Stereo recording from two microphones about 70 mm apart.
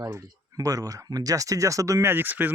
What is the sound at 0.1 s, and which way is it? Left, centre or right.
Speech, right.